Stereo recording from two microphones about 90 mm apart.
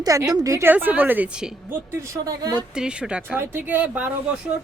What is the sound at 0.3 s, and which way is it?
Speech, 40° right (ahead or behind).